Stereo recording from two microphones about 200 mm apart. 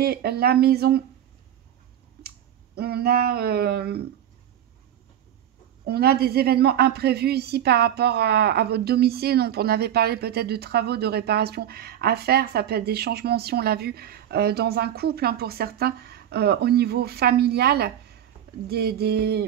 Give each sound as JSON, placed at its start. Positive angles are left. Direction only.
{"t": 0.0, "sound": "a woman's voice", "side_deg": -50}
{"t": 2.2, "sound": "speech", "side_deg": -50}
{"t": 5.9, "sound": "a woman's voice", "side_deg": -50}